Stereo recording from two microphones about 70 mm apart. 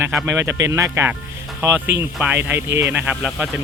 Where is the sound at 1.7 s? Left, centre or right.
Right.